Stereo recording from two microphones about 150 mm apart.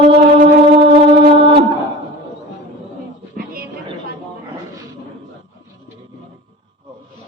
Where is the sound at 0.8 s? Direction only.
35° right (ahead or behind).